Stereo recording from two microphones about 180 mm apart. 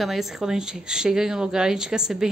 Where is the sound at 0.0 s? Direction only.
Centre (ahead or behind).